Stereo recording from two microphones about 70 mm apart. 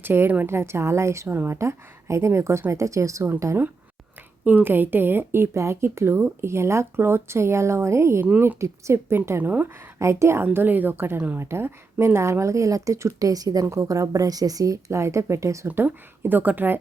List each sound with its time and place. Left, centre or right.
0.0 s speech: right
9.4 s speech: right
10.0 s speech: right
10.4 s speech: right
15.6 s speech: right